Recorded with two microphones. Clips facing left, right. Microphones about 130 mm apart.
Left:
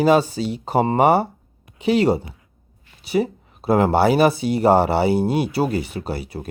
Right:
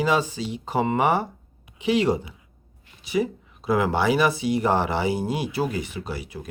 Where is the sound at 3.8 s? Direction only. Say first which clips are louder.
Left 6 dB; 35° left (ahead or behind).